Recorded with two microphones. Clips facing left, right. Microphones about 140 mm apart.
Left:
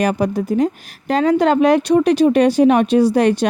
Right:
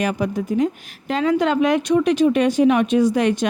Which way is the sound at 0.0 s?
35° left (ahead or behind).